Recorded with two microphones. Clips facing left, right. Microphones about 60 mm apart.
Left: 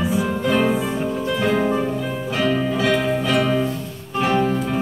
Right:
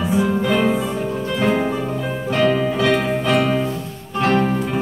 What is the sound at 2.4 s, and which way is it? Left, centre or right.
Music, centre.